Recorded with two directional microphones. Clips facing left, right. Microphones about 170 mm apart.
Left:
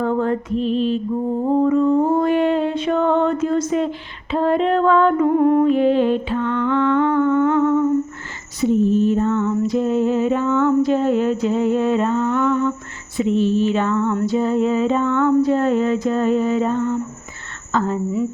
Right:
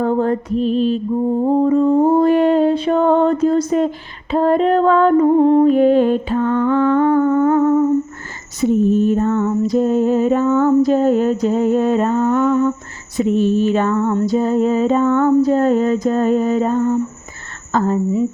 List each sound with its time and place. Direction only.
0.0 s music: 35° right (ahead or behind)
5.6 s humming: 45° right (ahead or behind)
8.6 s music: 50° right (ahead or behind)
17.7 s a woman's voice: 40° right (ahead or behind)